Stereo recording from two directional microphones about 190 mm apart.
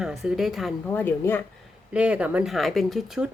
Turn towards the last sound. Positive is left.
turn(degrees=0)  # may be behind; listen again after turning